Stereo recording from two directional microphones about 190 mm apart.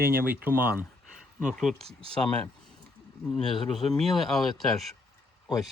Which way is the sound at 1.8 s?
30° right (ahead or behind).